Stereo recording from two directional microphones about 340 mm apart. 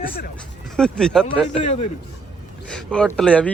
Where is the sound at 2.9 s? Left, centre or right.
Centre.